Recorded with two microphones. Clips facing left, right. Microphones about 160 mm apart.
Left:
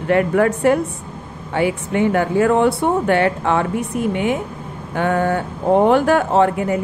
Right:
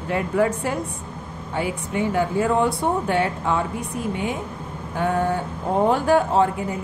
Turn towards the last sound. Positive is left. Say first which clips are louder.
# left 5 dB
turn(degrees=70)  # may be behind; listen again after turning